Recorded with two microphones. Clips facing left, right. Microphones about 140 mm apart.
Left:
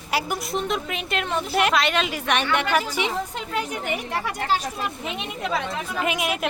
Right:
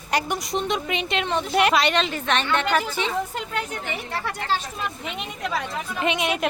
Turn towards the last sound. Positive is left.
turn(degrees=0)  # may be behind; listen again after turning